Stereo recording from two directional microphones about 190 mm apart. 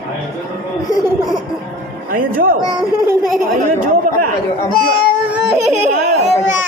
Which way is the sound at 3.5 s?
45° right (ahead or behind).